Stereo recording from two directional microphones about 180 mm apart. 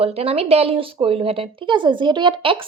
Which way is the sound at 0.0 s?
35° right (ahead or behind).